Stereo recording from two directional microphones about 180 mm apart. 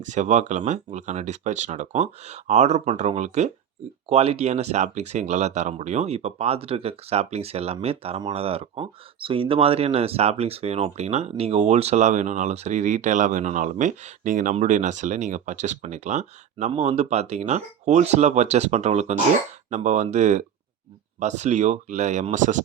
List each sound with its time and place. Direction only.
0.0 s speech: 45° right (ahead or behind)